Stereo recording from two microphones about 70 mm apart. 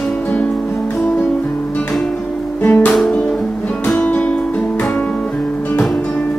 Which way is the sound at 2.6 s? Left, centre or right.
Left.